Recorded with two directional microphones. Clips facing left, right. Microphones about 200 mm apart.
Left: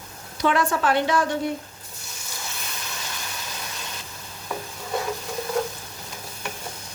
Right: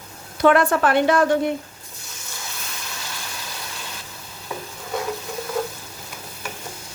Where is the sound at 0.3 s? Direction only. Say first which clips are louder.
Right 6 dB; 55° right (ahead or behind).